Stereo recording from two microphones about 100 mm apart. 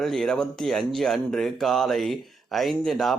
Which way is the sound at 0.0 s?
5° left (ahead or behind).